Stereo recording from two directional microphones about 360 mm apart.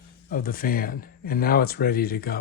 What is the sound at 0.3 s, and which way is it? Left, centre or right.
Speech, left.